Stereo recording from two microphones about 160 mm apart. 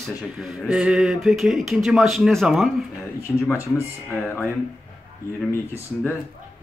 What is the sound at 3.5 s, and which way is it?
Speech, 15° left (ahead or behind).